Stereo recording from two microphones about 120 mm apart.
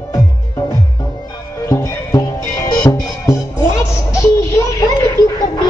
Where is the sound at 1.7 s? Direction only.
30° left (ahead or behind).